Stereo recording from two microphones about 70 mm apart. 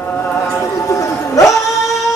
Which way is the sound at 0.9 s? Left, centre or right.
Left.